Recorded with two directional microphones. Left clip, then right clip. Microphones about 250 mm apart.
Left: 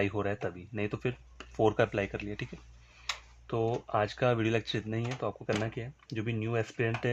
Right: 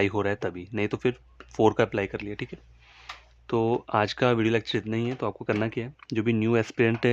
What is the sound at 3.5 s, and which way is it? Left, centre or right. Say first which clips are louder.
Speech: right 6 dB; right.